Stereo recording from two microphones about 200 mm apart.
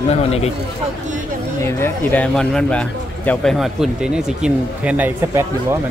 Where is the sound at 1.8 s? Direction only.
10° left (ahead or behind); by 5.8 s 10° right (ahead or behind).